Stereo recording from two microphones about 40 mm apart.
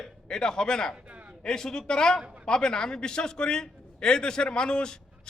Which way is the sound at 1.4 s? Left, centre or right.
Centre.